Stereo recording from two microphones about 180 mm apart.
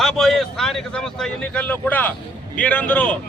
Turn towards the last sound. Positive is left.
turn(degrees=10)  # may be behind; listen again after turning